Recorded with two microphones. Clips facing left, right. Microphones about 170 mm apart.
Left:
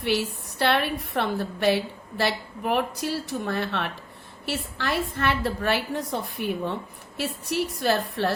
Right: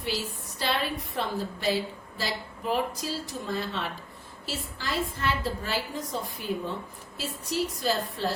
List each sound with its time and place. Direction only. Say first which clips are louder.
0.0 s a woman's voice: left 7 dB; 65° left (ahead or behind)